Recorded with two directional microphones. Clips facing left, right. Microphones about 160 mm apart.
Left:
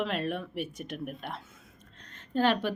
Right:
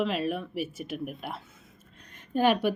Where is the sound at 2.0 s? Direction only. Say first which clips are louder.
Right 2 dB; 10° right (ahead or behind).